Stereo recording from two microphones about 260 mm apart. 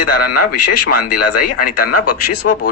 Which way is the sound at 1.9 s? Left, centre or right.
Left.